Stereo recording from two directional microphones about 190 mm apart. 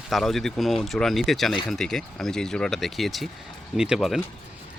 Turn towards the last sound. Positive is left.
turn(degrees=0)  # may be behind; listen again after turning